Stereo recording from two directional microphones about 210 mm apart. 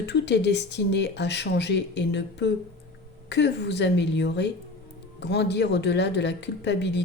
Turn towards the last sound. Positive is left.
turn(degrees=55)  # may be behind; listen again after turning